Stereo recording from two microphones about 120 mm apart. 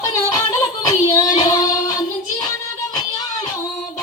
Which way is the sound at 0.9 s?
30° left (ahead or behind).